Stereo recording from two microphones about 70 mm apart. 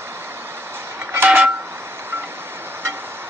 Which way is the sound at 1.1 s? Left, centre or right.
Right.